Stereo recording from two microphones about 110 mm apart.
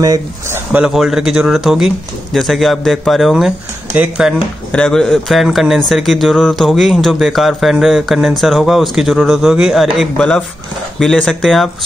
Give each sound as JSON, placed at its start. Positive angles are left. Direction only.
{"t": 0.8, "sound": "speech", "side_deg": -5}
{"t": 4.7, "sound": "speech", "side_deg": 5}
{"t": 10.1, "sound": "speech", "side_deg": 10}